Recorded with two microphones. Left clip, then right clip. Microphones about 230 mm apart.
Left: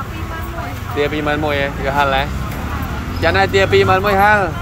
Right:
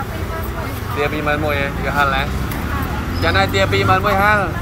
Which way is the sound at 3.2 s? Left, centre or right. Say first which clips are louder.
Left 3 dB; left.